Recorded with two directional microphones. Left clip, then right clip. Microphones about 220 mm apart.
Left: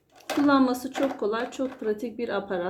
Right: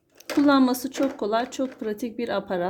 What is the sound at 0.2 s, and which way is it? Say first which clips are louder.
Speech: right 2 dB; 45° right (ahead or behind).